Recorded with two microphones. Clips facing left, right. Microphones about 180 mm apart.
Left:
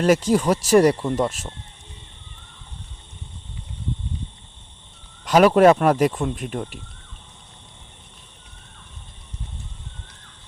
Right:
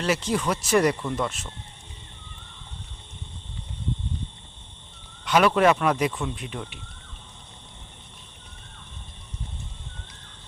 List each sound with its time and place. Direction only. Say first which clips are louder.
0.0 s speech: left 7 dB; 45° left (ahead or behind)
5.2 s speech: left 6 dB; 40° left (ahead or behind)